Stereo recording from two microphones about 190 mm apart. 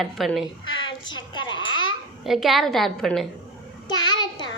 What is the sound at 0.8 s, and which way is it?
A child's voice, 25° left (ahead or behind).